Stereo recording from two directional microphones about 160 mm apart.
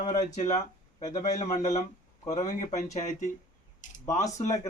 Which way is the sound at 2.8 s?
45° left (ahead or behind).